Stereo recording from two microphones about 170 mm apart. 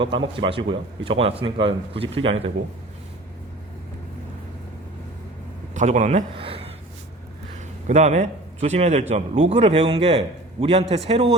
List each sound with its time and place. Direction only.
0.0 s a man's voice: 30° right (ahead or behind)
5.7 s speech: 45° right (ahead or behind)
6.3 s a sound: 35° right (ahead or behind)
7.9 s a man's voice: 40° right (ahead or behind)